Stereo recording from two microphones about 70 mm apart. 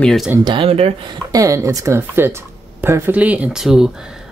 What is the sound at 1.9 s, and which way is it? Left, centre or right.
Speech, right.